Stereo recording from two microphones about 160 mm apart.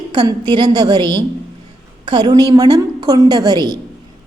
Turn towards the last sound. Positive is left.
turn(degrees=-25)  # may be behind; listen again after turning